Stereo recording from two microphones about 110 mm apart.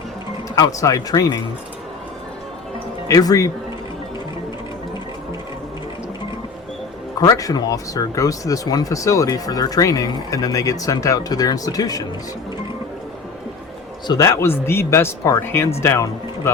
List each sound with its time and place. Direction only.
0.5 s speech: 30° left (ahead or behind)
3.1 s speech: 30° left (ahead or behind)
7.2 s speech: 35° left (ahead or behind)
14.1 s speech: 30° left (ahead or behind)